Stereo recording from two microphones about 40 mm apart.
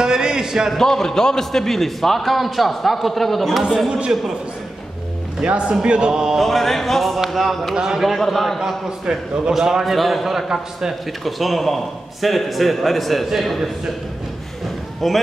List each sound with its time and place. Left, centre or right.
0.0 s a man's voice: centre
0.7 s a man's voice: centre
5.4 s speech: right
6.1 s a man's voice: centre
6.4 s a man's voice: centre
7.7 s a man's voice: centre
8.2 s a man's voice: centre
8.5 s a man's voice: centre
9.8 s a man's voice: centre
11.2 s a man's voice: centre
15.0 s a man's voice: centre